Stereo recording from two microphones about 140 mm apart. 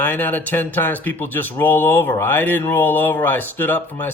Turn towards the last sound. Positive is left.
turn(degrees=15)  # may be behind; listen again after turning